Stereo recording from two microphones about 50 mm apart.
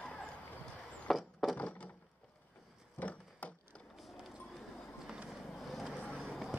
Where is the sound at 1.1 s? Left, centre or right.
Centre.